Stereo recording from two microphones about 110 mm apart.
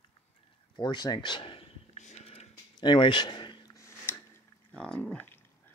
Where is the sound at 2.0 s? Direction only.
75° left (ahead or behind).